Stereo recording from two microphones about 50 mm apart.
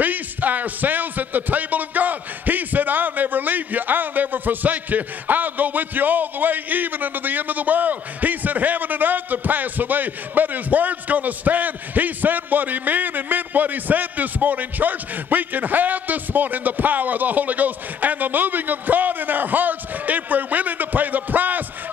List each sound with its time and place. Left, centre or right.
0.0 s speech: right